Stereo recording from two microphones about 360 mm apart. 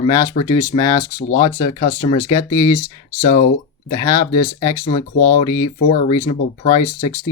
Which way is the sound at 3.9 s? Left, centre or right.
Centre.